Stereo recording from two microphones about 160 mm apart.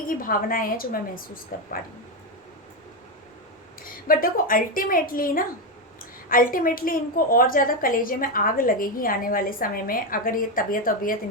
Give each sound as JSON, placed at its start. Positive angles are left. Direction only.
{"t": 0.1, "sound": "a woman's voice", "side_deg": 60}
{"t": 3.8, "sound": "a woman's voice", "side_deg": 60}